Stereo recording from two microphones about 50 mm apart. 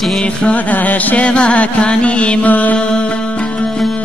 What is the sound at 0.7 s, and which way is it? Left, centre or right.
Music, left.